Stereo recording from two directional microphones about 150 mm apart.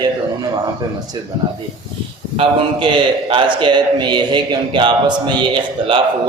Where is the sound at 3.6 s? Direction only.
30° right (ahead or behind).